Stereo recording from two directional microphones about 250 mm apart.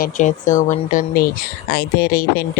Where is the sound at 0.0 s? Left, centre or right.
Left.